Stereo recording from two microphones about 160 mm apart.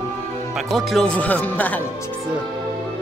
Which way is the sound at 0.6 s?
Centre (ahead or behind).